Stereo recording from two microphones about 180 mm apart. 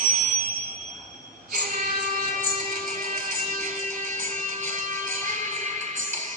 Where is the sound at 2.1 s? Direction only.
45° right (ahead or behind).